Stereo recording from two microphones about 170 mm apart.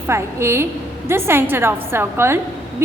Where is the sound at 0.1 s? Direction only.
15° right (ahead or behind).